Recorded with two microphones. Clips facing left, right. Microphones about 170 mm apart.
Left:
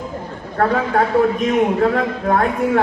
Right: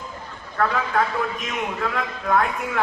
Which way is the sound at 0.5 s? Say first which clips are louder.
Left 5 dB; 40° left (ahead or behind).